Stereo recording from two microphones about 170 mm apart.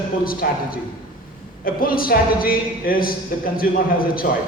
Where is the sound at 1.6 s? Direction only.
60° left (ahead or behind).